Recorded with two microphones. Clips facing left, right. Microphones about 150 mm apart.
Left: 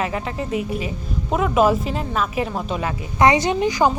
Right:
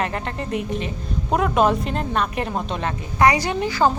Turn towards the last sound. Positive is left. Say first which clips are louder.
# left 2 dB
turn(degrees=15)  # may be behind; listen again after turning